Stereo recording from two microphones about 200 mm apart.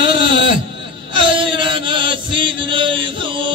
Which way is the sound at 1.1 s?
25° right (ahead or behind).